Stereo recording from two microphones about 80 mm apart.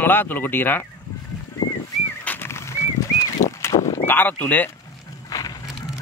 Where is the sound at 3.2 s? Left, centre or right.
Left.